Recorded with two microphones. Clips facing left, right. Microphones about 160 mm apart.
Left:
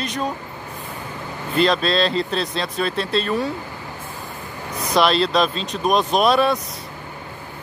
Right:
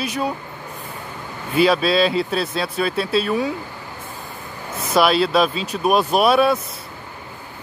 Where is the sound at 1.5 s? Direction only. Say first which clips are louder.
Right 2 dB; 5° right (ahead or behind).